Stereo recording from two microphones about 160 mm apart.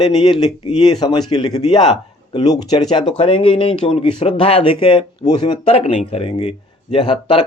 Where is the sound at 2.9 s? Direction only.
35° left (ahead or behind).